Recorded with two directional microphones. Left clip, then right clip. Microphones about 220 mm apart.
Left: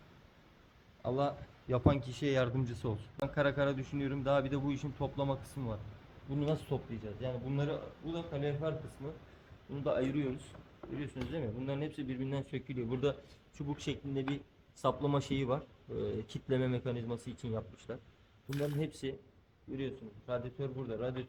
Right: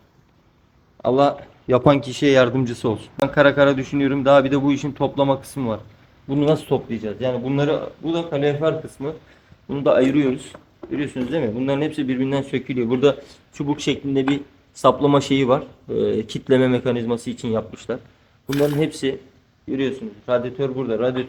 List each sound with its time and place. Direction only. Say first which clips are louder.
1.0 s speech: right 18 dB; 25° left (ahead or behind)
3.2 s speech: right 18 dB; 10° left (ahead or behind)
6.6 s speech: right 18 dB; 20° left (ahead or behind)
7.2 s speech: right 18 dB; 5° left (ahead or behind)
18.8 s speech: right 18 dB; 15° left (ahead or behind)